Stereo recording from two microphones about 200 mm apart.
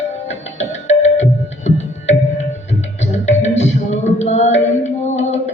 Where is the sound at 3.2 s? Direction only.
35° left (ahead or behind).